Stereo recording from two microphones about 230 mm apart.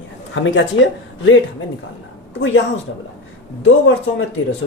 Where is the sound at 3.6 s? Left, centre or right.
Left.